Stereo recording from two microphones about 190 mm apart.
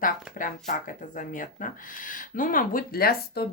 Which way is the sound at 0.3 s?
45° left (ahead or behind).